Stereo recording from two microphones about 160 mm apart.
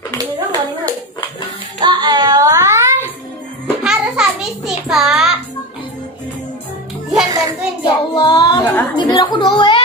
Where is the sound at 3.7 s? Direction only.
5° right (ahead or behind).